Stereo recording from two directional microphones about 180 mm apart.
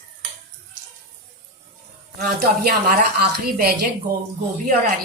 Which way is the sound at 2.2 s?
55° right (ahead or behind).